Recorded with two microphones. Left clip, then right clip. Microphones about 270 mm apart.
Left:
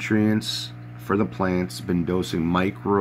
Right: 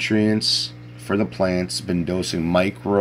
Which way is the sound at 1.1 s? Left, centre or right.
Centre.